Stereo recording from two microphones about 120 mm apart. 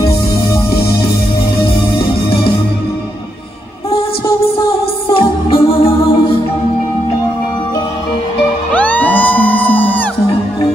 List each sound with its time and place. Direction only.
5.1 s music: 50° left (ahead or behind)
8.7 s music: 15° left (ahead or behind)